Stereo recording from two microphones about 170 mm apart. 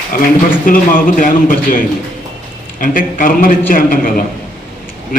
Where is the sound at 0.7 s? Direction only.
55° left (ahead or behind).